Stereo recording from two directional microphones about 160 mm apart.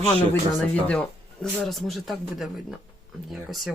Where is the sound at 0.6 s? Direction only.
10° left (ahead or behind).